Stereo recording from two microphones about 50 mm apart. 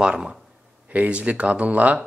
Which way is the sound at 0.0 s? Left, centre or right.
Centre.